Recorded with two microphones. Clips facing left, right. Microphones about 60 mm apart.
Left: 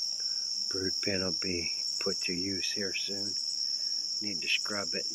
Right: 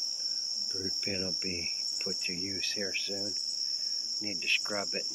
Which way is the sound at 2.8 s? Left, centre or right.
Centre.